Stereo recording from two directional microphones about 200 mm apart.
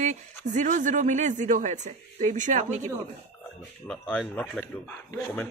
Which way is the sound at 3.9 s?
5° left (ahead or behind).